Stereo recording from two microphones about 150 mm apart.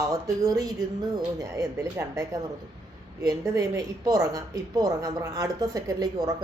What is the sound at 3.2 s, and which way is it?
A woman's voice, 20° right (ahead or behind).